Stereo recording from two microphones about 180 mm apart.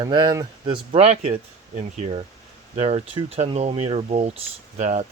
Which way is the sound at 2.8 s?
35° right (ahead or behind).